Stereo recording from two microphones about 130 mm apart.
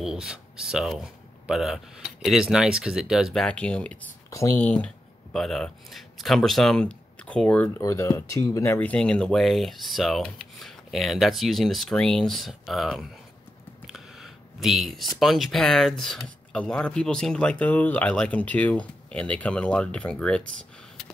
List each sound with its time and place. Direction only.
0.0 s speech: 5° right (ahead or behind)
3.4 s speech: 10° left (ahead or behind)
4.3 s speech: 25° left (ahead or behind)
4.6 s speech: 10° left (ahead or behind)
7.8 s speech: 25° left (ahead or behind)
8.7 s speech: 10° left (ahead or behind)
13.8 s a sound: centre (ahead or behind)
15.1 s speech: centre (ahead or behind)